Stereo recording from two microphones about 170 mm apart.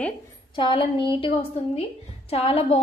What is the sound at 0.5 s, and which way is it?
A woman's voice, 30° left (ahead or behind).